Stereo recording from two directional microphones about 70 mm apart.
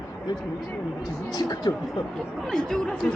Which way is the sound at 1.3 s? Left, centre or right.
Left.